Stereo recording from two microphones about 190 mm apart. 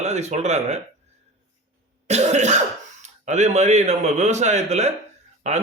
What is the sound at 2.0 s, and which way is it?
A man's voice, 35° right (ahead or behind).